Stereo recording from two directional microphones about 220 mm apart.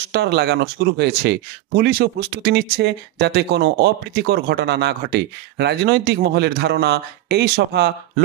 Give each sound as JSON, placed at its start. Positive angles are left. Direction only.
{"t": 0.1, "sound": "speech", "side_deg": -50}